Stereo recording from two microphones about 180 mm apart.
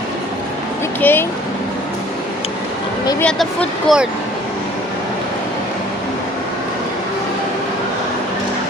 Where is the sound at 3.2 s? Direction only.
5° left (ahead or behind).